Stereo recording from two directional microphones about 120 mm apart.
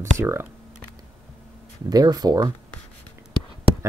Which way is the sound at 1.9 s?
30° right (ahead or behind).